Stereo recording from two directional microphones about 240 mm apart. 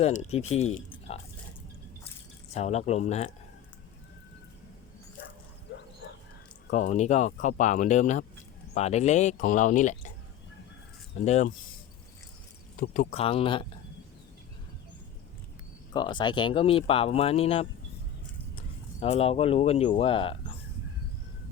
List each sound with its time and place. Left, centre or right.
0.0 s speech: left
2.5 s speech: left
6.7 s speech: left
12.8 s speech: left
15.9 s speech: centre